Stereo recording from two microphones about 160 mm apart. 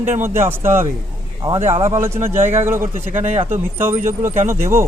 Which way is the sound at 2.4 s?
45° right (ahead or behind).